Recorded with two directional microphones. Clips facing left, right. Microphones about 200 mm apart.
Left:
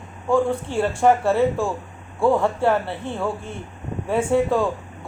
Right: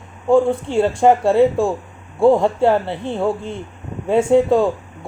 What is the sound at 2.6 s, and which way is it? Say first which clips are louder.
Speech: right 4 dB; 20° right (ahead or behind).